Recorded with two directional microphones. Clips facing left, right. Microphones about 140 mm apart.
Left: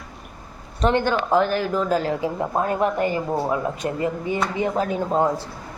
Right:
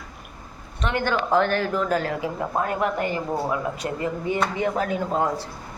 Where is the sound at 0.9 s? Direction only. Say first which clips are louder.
Right 1 dB; 15° left (ahead or behind).